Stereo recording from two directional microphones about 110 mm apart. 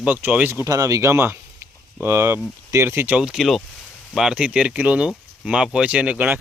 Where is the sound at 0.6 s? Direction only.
30° right (ahead or behind).